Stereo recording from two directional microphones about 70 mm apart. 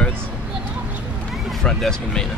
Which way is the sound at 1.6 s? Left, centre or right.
Centre.